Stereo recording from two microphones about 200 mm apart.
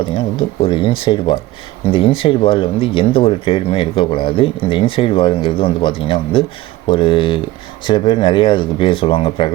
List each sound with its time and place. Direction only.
0.0 s speech: 25° left (ahead or behind)